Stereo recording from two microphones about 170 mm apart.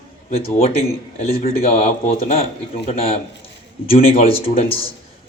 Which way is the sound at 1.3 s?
60° left (ahead or behind).